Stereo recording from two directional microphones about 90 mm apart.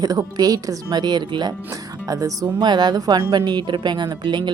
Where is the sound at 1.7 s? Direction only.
40° right (ahead or behind).